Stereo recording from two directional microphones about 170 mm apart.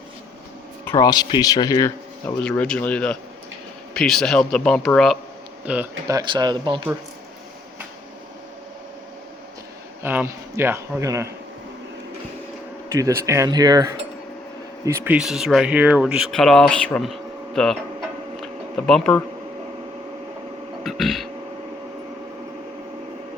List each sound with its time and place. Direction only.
0.9 s speech: 20° left (ahead or behind)
2.4 s speech: 5° left (ahead or behind)
5.6 s a man's voice: 10° right (ahead or behind)
6.1 s speech: 25° right (ahead or behind)
10.0 s a man's voice: 10° right (ahead or behind)
12.9 s speech: 20° right (ahead or behind); by 17.7 s centre (ahead or behind)
18.8 s speech: 5° left (ahead or behind)
20.8 s a sound: centre (ahead or behind)